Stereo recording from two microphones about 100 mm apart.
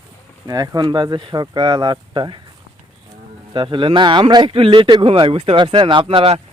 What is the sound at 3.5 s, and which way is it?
Speech, 55° right (ahead or behind).